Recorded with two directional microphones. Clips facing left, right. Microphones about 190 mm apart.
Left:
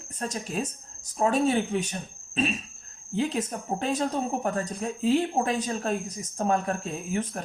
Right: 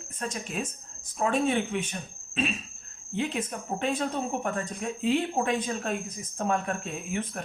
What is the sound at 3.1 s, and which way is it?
Speech, 40° left (ahead or behind).